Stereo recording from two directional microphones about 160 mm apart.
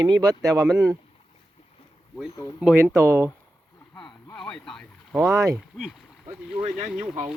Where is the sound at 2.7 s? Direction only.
15° right (ahead or behind).